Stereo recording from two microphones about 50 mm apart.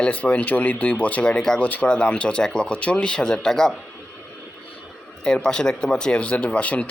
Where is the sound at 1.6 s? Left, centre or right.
Left; by 3.7 s centre.